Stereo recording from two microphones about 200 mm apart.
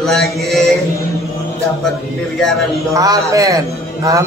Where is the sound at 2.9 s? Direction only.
15° right (ahead or behind).